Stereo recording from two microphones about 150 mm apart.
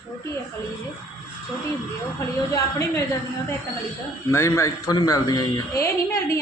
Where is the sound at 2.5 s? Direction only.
20° left (ahead or behind).